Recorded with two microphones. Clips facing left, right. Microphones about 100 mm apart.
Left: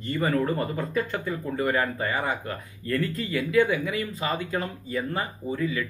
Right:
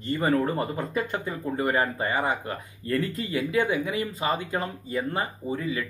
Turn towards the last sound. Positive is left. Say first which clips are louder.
# left 1 dB
turn(degrees=-20)  # may be behind; listen again after turning